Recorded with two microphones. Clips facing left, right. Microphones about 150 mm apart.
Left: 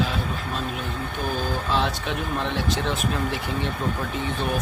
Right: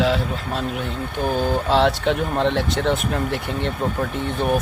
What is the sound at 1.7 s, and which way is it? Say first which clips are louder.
Speech: right 8 dB; 65° right (ahead or behind).